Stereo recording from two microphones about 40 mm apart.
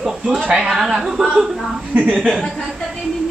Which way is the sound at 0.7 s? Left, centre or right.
Centre.